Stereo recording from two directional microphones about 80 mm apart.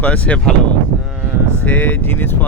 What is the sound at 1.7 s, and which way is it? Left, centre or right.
Speech, left.